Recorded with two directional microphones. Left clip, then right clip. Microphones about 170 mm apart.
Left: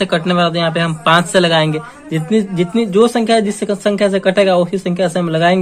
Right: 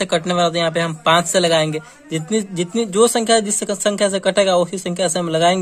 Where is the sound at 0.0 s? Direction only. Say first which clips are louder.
Left 3 dB; 45° right (ahead or behind).